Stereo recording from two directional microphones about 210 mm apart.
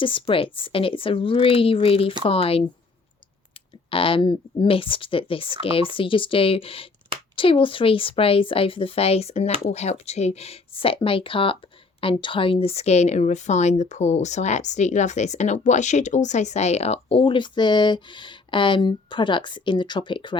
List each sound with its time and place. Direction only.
0.0 s speech: 25° left (ahead or behind)
3.8 s a woman's voice: 25° left (ahead or behind)